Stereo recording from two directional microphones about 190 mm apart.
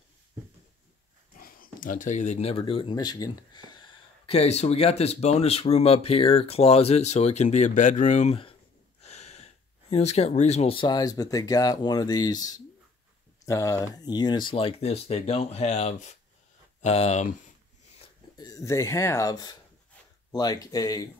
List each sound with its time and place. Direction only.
1.4 s speech: 50° left (ahead or behind)
18.4 s speech: 15° left (ahead or behind)